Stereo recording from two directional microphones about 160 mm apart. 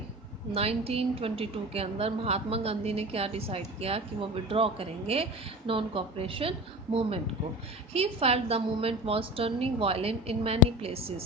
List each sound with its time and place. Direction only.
0.5 s a woman's voice: 40° right (ahead or behind)
7.9 s a woman's voice: 40° right (ahead or behind)